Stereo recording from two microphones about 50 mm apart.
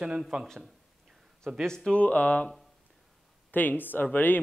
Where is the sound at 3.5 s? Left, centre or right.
Left.